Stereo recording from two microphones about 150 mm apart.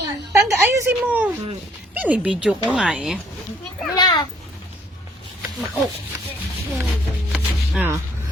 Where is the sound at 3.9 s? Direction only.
30° left (ahead or behind).